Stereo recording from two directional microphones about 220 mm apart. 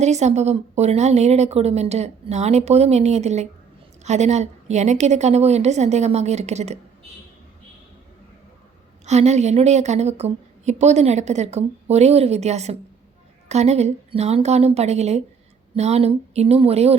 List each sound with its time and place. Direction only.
0.0 s a woman's voice: 30° right (ahead or behind)
9.0 s a woman's voice: 30° right (ahead or behind)